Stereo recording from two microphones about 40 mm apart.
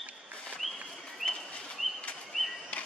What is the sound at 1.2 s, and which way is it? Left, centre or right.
Bird, centre.